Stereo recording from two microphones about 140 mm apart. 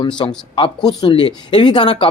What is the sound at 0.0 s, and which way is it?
Speech, 35° left (ahead or behind).